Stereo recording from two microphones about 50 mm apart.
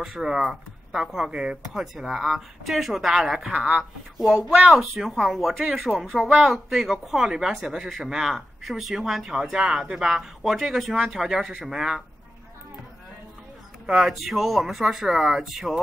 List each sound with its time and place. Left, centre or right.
0.0 s speech: centre
3.5 s speech: right
4.6 s speech: centre
10.4 s speech: centre
13.9 s speech: centre